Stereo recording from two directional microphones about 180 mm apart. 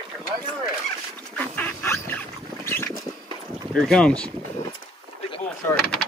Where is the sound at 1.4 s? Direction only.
10° left (ahead or behind).